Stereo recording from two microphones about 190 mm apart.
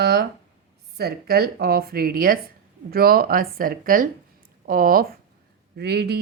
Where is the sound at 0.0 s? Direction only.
55° right (ahead or behind).